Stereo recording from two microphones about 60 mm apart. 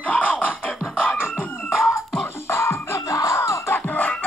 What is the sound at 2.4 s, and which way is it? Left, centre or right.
Music, left.